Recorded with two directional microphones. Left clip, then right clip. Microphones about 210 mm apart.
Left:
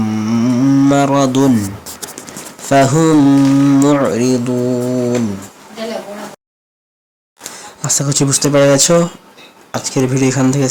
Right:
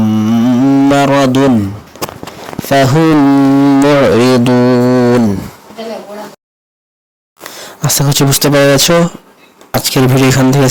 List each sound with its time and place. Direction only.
0.0 s carnatic music: 25° right (ahead or behind)
2.6 s speech: 25° right (ahead or behind)
7.5 s speech: 30° right (ahead or behind)